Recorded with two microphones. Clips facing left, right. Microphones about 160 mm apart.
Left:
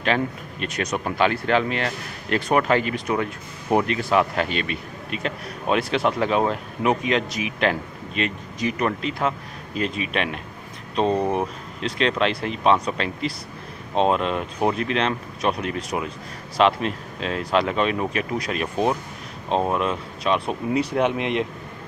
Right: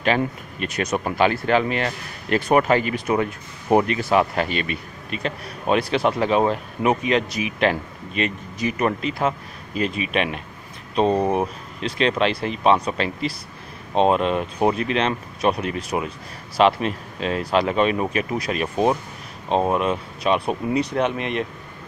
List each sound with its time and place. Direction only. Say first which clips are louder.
0.0 s speech: right 2 dB; 5° right (ahead or behind)
20.7 s speech: left 2 dB; 5° left (ahead or behind)